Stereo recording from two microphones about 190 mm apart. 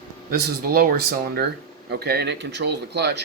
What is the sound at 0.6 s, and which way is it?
Speech, 50° right (ahead or behind).